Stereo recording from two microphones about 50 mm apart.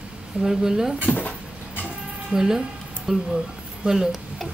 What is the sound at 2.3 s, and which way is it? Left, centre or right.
Speech, centre.